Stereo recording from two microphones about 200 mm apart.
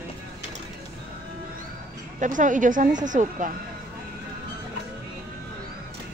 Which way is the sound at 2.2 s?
40° right (ahead or behind).